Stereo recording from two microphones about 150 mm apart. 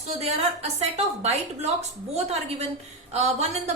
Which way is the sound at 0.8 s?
45° right (ahead or behind).